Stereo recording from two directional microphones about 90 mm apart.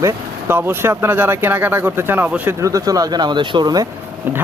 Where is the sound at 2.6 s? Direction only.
40° right (ahead or behind).